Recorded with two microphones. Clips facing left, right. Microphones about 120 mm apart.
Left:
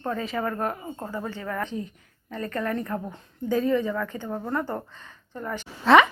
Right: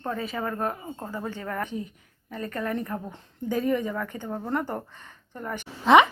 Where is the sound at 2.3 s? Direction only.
15° right (ahead or behind).